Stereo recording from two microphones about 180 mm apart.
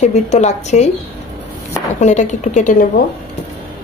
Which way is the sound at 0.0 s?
40° left (ahead or behind).